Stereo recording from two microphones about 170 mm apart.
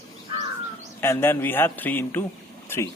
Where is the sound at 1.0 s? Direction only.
15° left (ahead or behind).